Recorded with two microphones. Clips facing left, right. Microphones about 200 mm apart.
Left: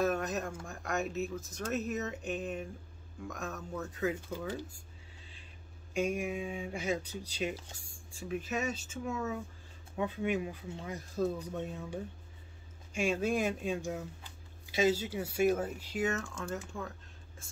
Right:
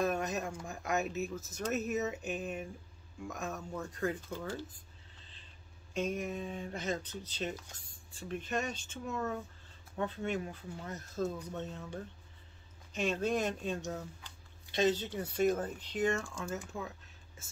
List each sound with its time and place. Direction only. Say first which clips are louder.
0.0 s speech: left 1 dB; centre (ahead or behind)
5.2 s a sound: left 4 dB; 10° left (ahead or behind)
5.9 s speech: left 2 dB; 10° left (ahead or behind)